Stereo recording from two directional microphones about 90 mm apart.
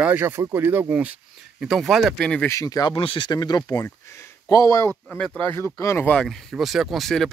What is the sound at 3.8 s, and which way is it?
Speech, 30° left (ahead or behind).